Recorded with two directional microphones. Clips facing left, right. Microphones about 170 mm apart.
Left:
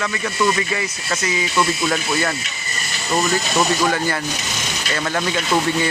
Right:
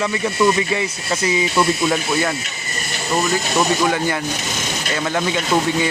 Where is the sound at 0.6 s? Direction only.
20° right (ahead or behind).